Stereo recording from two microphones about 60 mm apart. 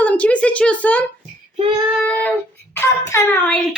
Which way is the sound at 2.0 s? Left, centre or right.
Left.